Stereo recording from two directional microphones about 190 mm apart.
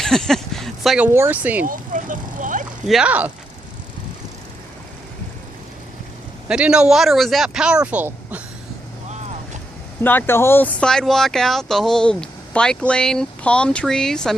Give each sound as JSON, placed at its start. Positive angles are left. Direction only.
{"t": 0.0, "sound": "speech", "side_deg": 0}
{"t": 1.6, "sound": "vehicle", "side_deg": -45}
{"t": 2.8, "sound": "speech", "side_deg": -5}
{"t": 6.5, "sound": "speech", "side_deg": -5}
{"t": 10.0, "sound": "speech", "side_deg": 10}